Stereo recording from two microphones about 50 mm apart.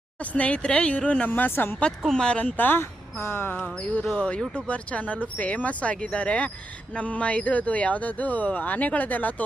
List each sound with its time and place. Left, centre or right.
0.2 s speech: left
1.3 s speech: left
2.0 s speech: centre
2.6 s speech: left
4.2 s speech: centre; by 9.3 s left